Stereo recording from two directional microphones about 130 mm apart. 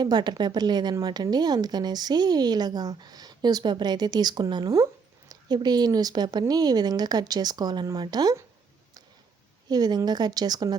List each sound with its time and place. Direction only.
0.0 s a woman's voice: 35° right (ahead or behind)
9.6 s a woman's voice: 30° right (ahead or behind)